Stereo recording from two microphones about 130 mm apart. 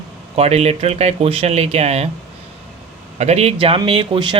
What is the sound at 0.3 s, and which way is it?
Speech, 55° right (ahead or behind).